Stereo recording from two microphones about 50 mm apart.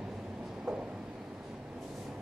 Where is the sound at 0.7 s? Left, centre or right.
Centre.